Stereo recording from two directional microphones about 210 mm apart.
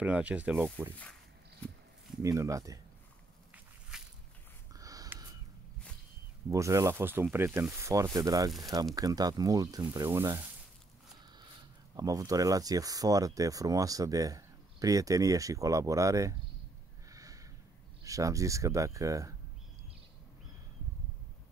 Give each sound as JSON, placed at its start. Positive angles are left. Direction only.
{"t": 0.0, "sound": "speech", "side_deg": -5}
{"t": 1.6, "sound": "a sound", "side_deg": 5}
{"t": 2.2, "sound": "speech", "side_deg": -15}
{"t": 3.9, "sound": "walk", "side_deg": -5}
{"t": 4.7, "sound": "a sound", "side_deg": -15}
{"t": 6.5, "sound": "speech", "side_deg": -15}
{"t": 12.0, "sound": "speech", "side_deg": -15}
{"t": 17.1, "sound": "a sound", "side_deg": -15}
{"t": 18.0, "sound": "speech", "side_deg": -15}